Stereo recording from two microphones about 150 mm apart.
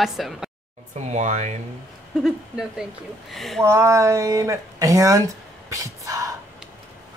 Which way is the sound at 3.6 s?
20° right (ahead or behind).